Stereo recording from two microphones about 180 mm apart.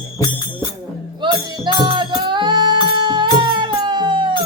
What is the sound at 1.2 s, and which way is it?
Music, 25° right (ahead or behind).